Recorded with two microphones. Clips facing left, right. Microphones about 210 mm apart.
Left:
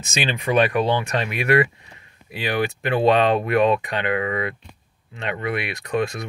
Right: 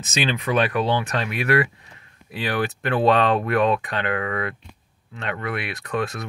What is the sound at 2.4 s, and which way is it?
Speech, 15° left (ahead or behind).